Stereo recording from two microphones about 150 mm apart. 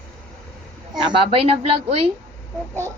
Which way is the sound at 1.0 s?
35° right (ahead or behind).